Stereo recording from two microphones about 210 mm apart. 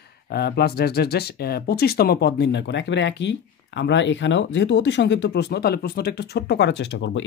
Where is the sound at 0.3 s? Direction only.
50° left (ahead or behind).